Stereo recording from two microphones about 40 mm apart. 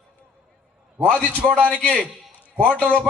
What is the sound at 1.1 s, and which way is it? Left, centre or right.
A man's voice, centre.